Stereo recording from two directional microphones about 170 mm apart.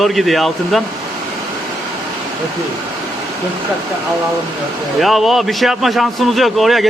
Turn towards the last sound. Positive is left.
turn(degrees=0)  # may be behind; listen again after turning